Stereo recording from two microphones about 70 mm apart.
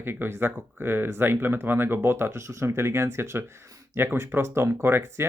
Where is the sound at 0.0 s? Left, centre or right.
Right.